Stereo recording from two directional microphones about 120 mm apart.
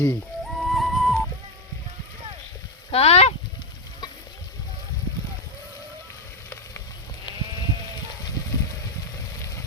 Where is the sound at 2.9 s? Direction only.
60° left (ahead or behind).